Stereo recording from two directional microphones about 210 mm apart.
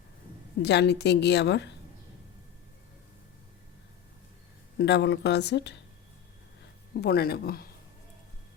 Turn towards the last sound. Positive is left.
turn(degrees=45)  # may be behind; listen again after turning